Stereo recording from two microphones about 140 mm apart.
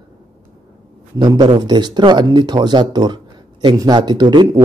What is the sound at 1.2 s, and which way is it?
A man's voice, 30° right (ahead or behind).